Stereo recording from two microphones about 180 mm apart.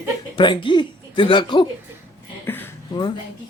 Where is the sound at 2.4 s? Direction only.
10° left (ahead or behind).